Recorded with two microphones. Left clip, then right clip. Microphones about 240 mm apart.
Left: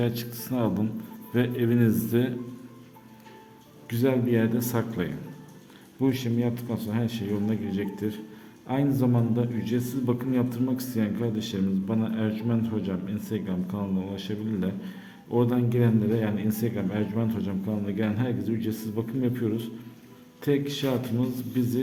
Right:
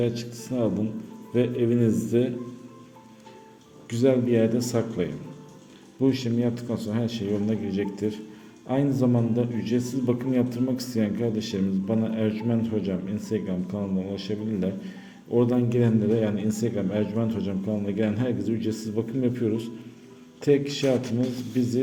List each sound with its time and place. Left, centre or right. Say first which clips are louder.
0.0 s a man's voice: right 2 dB; centre
3.8 s a man's voice: right 3 dB; centre